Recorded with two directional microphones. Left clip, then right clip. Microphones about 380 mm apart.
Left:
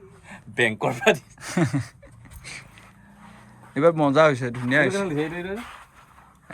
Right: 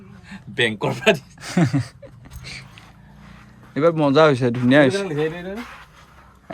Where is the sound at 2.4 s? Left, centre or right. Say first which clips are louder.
Right 3 dB; centre.